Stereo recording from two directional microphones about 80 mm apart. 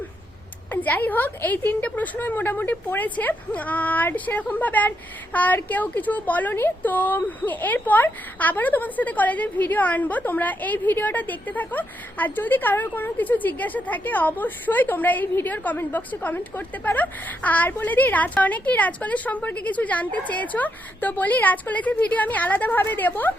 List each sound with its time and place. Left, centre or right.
0.7 s a woman's voice: left